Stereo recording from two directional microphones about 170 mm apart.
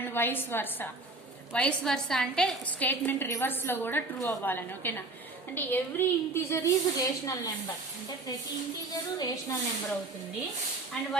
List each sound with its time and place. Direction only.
0.0 s a woman's voice: 10° left (ahead or behind)
9.1 s a woman's voice: 20° left (ahead or behind)